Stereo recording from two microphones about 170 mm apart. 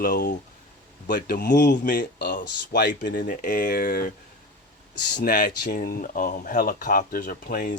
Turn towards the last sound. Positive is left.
turn(degrees=50)  # may be behind; listen again after turning